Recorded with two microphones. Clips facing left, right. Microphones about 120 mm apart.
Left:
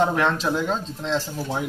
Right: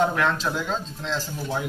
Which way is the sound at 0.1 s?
20° left (ahead or behind).